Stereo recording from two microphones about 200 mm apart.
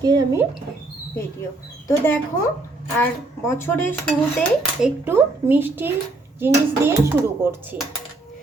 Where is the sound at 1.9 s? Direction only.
10° left (ahead or behind).